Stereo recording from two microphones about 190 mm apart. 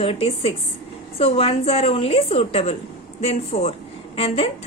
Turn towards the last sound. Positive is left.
turn(degrees=30)  # may be behind; listen again after turning